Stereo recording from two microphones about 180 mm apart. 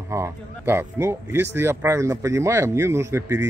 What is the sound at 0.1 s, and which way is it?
Speech, 15° right (ahead or behind).